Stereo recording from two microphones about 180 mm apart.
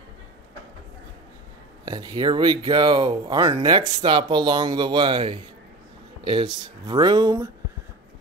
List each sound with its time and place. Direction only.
1.9 s speech: 20° right (ahead or behind)